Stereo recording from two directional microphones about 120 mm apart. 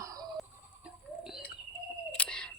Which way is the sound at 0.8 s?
5° right (ahead or behind).